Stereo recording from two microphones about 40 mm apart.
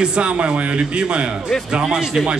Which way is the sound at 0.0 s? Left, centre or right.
Right.